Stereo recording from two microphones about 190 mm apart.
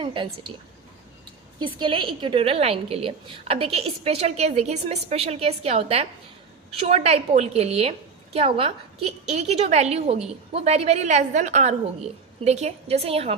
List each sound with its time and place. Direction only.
0.0 s a woman's voice: 25° right (ahead or behind)
1.5 s a woman's voice: 25° right (ahead or behind)